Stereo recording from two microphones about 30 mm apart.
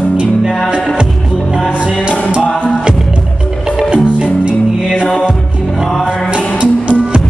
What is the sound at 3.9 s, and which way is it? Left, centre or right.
Music, right.